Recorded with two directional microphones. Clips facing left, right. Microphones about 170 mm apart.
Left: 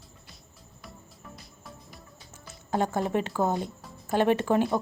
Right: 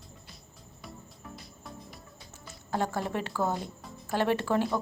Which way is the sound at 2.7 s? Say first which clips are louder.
Left 4 dB; 20° left (ahead or behind).